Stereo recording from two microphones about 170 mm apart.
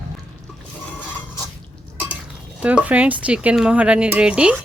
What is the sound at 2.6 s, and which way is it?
Speech, 10° right (ahead or behind).